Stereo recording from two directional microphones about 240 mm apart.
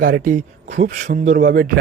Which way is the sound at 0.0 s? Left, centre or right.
Right.